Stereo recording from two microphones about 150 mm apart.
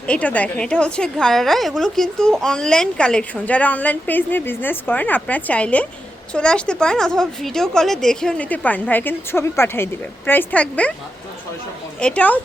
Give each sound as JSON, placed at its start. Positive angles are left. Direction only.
{"t": 0.1, "sound": "a woman's voice", "side_deg": 10}
{"t": 11.9, "sound": "a woman's voice", "side_deg": 5}